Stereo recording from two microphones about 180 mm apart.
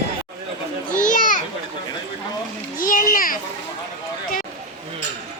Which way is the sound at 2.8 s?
50° left (ahead or behind).